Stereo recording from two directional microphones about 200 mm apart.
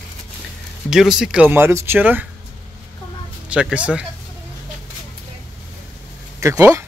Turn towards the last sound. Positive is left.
turn(degrees=-15)  # may be behind; listen again after turning